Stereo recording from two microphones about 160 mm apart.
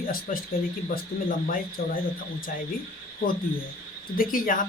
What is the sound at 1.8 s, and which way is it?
Speech, 75° left (ahead or behind).